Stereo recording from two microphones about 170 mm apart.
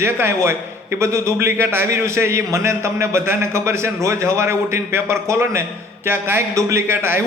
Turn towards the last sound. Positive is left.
turn(degrees=-15)  # may be behind; listen again after turning